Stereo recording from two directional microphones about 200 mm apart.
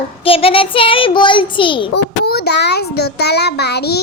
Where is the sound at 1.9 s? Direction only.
55° left (ahead or behind).